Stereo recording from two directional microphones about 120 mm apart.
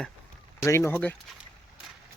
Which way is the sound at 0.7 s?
20° left (ahead or behind).